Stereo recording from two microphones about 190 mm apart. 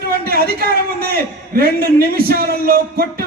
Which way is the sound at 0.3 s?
50° right (ahead or behind).